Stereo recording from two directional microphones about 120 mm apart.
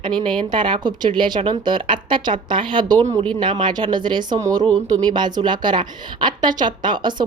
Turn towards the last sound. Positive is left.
turn(degrees=-40)  # may be behind; listen again after turning